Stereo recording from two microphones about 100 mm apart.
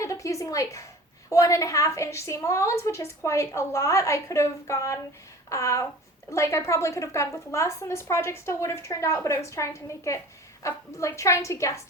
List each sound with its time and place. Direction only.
0.0 s a woman's voice: 30° left (ahead or behind)